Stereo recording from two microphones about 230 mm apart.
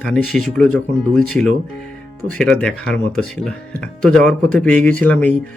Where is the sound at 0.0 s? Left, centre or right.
Centre.